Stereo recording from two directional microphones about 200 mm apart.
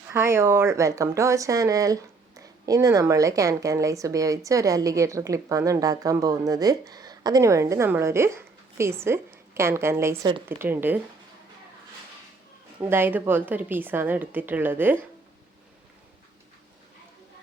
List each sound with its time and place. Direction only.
0.1 s speech: 15° right (ahead or behind)
12.8 s speech: 10° right (ahead or behind)